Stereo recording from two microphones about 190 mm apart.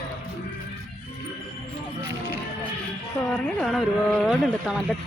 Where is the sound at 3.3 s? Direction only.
5° left (ahead or behind).